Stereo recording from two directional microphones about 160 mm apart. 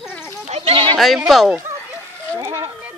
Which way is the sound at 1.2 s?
Centre (ahead or behind).